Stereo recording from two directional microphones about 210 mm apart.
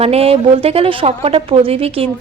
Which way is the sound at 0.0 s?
30° right (ahead or behind).